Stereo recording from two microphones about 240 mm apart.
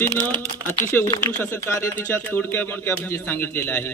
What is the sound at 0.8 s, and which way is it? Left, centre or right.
A man's voice, centre.